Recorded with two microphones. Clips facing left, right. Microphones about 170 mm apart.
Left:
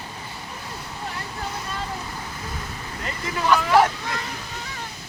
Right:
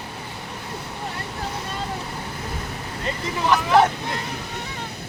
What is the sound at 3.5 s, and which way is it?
Speech, 20° right (ahead or behind).